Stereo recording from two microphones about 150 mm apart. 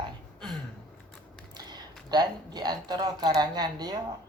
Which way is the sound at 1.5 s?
30° right (ahead or behind).